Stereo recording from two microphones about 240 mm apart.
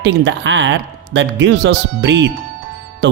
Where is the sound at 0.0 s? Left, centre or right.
Right.